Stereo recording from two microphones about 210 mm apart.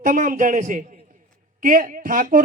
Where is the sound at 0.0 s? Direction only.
40° right (ahead or behind).